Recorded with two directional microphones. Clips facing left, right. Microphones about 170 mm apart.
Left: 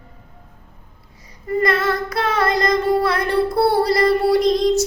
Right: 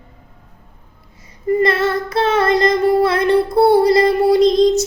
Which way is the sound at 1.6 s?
25° right (ahead or behind).